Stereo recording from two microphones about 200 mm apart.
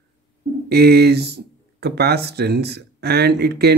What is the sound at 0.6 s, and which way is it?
Speech, 55° right (ahead or behind).